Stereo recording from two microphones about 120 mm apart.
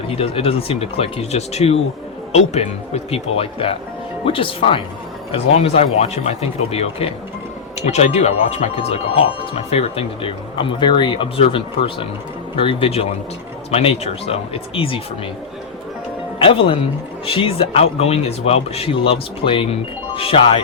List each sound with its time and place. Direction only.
0.2 s speech: 55° left (ahead or behind)
5.3 s speech: 60° left (ahead or behind)
7.8 s speech: 70° left (ahead or behind); by 15.0 s 50° left (ahead or behind)
16.4 s speech: 45° left (ahead or behind)